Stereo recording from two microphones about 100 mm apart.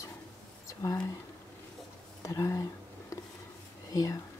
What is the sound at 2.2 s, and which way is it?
Speech, 30° left (ahead or behind).